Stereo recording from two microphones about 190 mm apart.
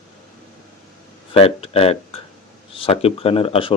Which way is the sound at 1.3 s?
30° left (ahead or behind).